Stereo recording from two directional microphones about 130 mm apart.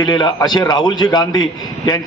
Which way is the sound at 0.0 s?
35° left (ahead or behind).